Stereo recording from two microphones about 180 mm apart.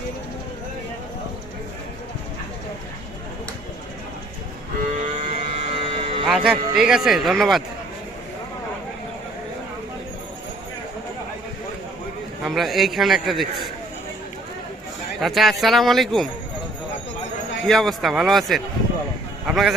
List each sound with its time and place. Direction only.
4.9 s a sound: 40° right (ahead or behind)
6.2 s speech: centre (ahead or behind)
12.4 s speech: centre (ahead or behind)
15.2 s speech: centre (ahead or behind)
17.7 s speech: centre (ahead or behind)